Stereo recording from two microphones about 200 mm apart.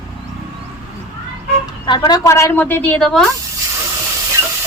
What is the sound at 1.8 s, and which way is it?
A woman's voice, 20° left (ahead or behind).